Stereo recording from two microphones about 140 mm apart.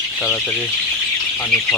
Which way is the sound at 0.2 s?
10° left (ahead or behind).